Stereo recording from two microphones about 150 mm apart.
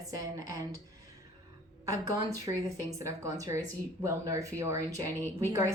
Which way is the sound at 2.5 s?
20° right (ahead or behind).